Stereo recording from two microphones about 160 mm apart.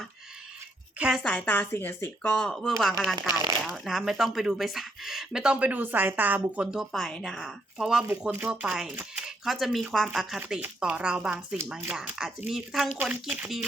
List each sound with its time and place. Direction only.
0.9 s speech: 5° right (ahead or behind)
1.2 s speech: 5° left (ahead or behind)